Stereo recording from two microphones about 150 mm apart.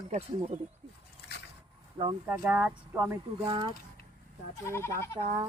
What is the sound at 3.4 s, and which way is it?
Speech, 40° right (ahead or behind).